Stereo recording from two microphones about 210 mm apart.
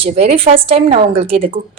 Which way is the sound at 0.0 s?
30° right (ahead or behind).